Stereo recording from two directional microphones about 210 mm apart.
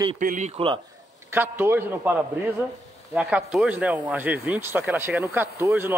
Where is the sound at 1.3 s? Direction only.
10° right (ahead or behind).